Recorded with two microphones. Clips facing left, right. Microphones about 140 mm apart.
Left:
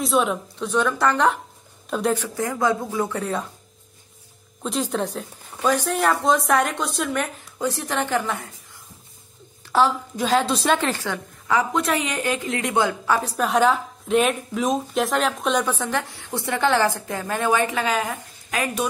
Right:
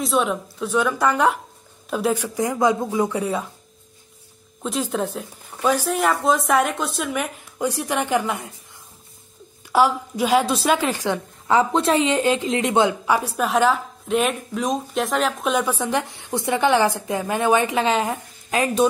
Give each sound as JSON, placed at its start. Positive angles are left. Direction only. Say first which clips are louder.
{"t": 0.0, "sound": "speech", "louder": "even", "side_deg": 0}
{"t": 2.2, "sound": "a woman's voice", "louder": "right 3 dB", "side_deg": -15}
{"t": 4.6, "sound": "speech", "louder": "right 1 dB", "side_deg": 0}
{"t": 7.5, "sound": "a woman's voice", "louder": "right 2 dB", "side_deg": -15}
{"t": 9.7, "sound": "a woman's voice", "louder": "right 1 dB", "side_deg": -10}
{"t": 11.4, "sound": "a woman's voice", "louder": "right 4 dB", "side_deg": -25}
{"t": 13.4, "sound": "a woman's voice", "louder": "left 1 dB", "side_deg": 0}